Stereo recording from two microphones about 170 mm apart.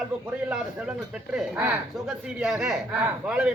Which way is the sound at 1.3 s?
5° right (ahead or behind).